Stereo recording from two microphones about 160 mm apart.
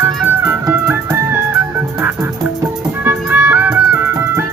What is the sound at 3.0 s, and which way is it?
Music, 15° right (ahead or behind).